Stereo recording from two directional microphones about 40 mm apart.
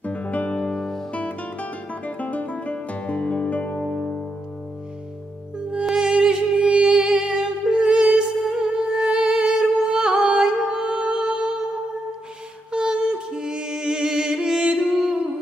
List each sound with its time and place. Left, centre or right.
0.0 s music: left
0.6 s music: centre
1.1 s guitar: left
3.7 s music: centre
5.9 s music: centre
8.4 s music: centre
12.7 s music: right